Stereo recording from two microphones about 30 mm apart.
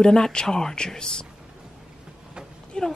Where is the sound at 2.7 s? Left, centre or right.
Left.